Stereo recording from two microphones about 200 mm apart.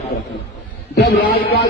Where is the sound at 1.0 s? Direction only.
50° left (ahead or behind).